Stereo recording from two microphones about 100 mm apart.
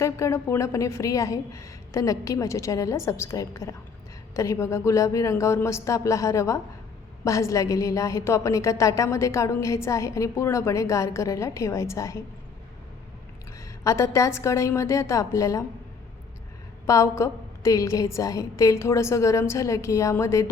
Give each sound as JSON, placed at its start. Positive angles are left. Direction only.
{"t": 0.0, "sound": "a woman's voice", "side_deg": 30}
{"t": 13.8, "sound": "a woman's voice", "side_deg": 30}
{"t": 16.8, "sound": "a woman's voice", "side_deg": 30}